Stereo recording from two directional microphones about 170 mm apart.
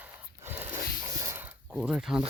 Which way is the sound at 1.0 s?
15° right (ahead or behind).